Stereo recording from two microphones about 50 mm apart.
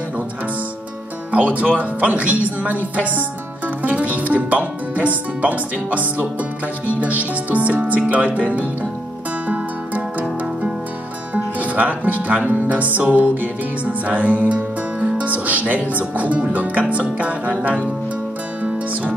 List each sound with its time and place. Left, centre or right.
1.3 s music: right
1.8 s speech: right
6.9 s music: right
11.3 s speech: right
13.1 s music: right